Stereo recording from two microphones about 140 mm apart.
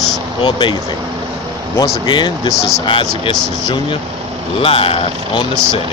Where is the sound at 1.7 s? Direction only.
25° left (ahead or behind).